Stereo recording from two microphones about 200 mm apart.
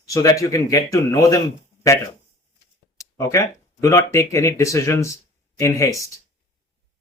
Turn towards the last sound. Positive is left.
turn(degrees=15)  # may be behind; listen again after turning